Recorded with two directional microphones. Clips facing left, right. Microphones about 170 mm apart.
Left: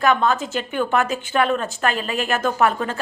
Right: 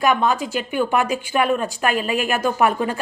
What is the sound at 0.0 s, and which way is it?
Speech, 10° right (ahead or behind).